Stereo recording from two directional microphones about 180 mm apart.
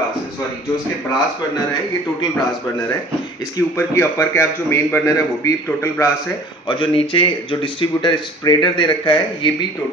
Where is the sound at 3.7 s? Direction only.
15° left (ahead or behind).